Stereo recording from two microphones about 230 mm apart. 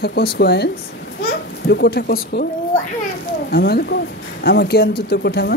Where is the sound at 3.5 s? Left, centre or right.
Left.